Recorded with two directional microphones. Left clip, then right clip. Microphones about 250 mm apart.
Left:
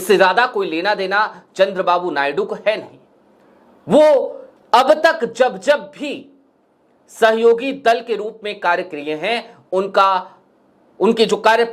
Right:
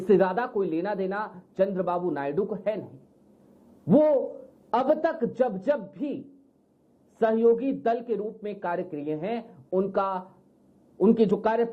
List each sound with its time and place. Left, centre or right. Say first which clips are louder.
0.0 s speech: left 10 dB; centre
4.2 s a man's voice: left 9 dB; left
4.7 s speech: left 12 dB; centre